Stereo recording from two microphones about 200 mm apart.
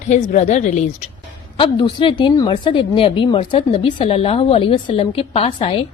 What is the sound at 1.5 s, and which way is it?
Speech, 25° left (ahead or behind).